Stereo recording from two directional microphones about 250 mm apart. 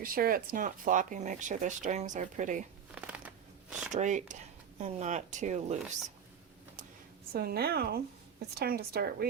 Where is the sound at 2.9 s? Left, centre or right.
Centre.